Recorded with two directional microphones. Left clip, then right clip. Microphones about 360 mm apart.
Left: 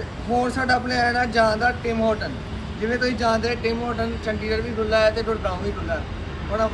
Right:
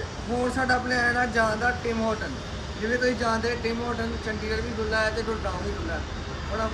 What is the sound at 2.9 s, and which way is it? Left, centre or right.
Speech, centre.